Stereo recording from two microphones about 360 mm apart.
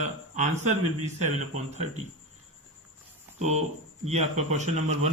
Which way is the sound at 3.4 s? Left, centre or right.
Centre.